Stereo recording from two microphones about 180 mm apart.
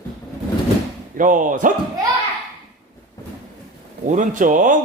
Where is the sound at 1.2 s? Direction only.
45° right (ahead or behind).